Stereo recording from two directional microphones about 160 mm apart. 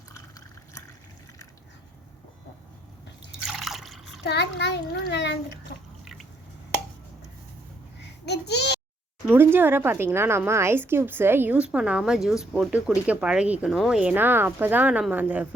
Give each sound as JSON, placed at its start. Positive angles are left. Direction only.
{"t": 0.1, "sound": "drip", "side_deg": 20}
{"t": 3.4, "sound": "liquid", "side_deg": -5}
{"t": 4.2, "sound": "a child's voice", "side_deg": 90}
{"t": 8.0, "sound": "babbling", "side_deg": 90}
{"t": 9.2, "sound": "a woman's voice", "side_deg": -15}